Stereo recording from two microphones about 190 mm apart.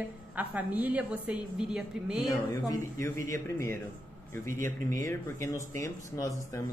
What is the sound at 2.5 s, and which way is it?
Speech, 15° left (ahead or behind).